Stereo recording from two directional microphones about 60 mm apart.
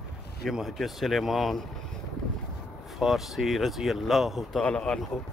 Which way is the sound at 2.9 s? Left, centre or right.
Centre.